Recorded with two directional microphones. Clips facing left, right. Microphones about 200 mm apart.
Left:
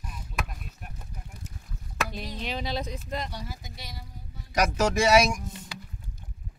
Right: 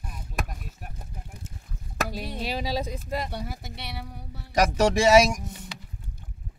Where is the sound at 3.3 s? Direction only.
60° right (ahead or behind).